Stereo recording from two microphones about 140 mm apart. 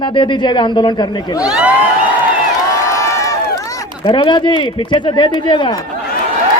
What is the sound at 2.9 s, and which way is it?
Crowd, 20° left (ahead or behind).